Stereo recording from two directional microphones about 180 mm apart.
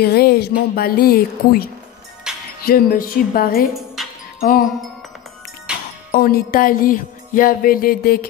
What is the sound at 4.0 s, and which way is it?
Music, centre (ahead or behind).